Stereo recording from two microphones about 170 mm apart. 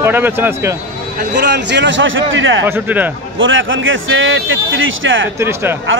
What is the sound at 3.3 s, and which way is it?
Speech, 90° right.